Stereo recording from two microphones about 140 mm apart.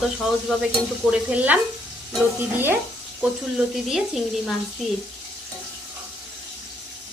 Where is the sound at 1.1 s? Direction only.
10° right (ahead or behind).